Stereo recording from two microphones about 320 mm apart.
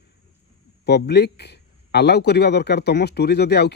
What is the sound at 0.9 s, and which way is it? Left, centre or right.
Speech, left.